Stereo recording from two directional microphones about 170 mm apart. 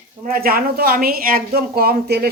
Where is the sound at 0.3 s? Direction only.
60° right (ahead or behind).